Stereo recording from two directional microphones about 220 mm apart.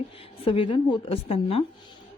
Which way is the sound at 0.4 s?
25° left (ahead or behind).